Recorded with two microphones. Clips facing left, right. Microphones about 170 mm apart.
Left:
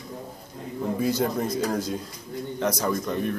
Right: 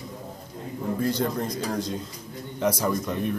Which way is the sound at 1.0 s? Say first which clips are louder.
Left 1 dB; 5° left (ahead or behind).